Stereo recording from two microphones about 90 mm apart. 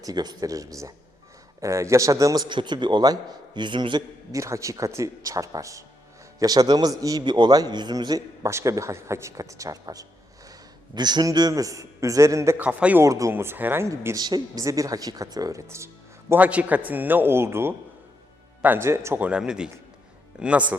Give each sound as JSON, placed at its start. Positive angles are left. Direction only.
{"t": 0.0, "sound": "speech", "side_deg": -50}
{"t": 2.5, "sound": "a man's voice", "side_deg": -60}
{"t": 4.4, "sound": "a man's voice", "side_deg": -35}
{"t": 7.2, "sound": "a man's voice", "side_deg": -55}
{"t": 10.9, "sound": "a man's voice", "side_deg": -55}
{"t": 12.5, "sound": "speech", "side_deg": -15}
{"t": 13.0, "sound": "speech", "side_deg": -35}
{"t": 13.3, "sound": "a man's voice", "side_deg": -25}
{"t": 14.2, "sound": "speech", "side_deg": -50}
{"t": 16.3, "sound": "a man's voice", "side_deg": -15}
{"t": 19.2, "sound": "speech", "side_deg": -10}